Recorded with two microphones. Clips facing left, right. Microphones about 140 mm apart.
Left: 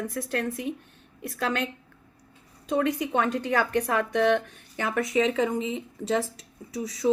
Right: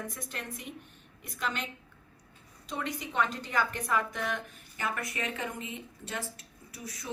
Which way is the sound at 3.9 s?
70° left (ahead or behind).